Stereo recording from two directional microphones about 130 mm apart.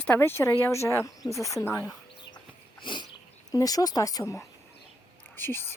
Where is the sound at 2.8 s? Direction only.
35° left (ahead or behind).